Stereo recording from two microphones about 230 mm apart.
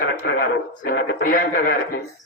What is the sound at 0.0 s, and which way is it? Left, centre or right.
Speech, left.